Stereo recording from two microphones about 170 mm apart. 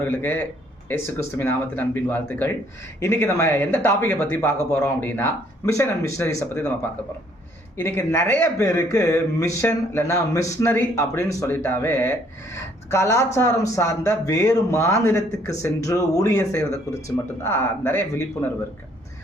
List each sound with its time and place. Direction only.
0.0 s speech: 10° left (ahead or behind)
7.8 s speech: 15° left (ahead or behind)